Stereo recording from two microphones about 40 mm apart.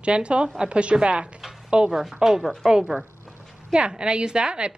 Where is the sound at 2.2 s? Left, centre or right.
Centre.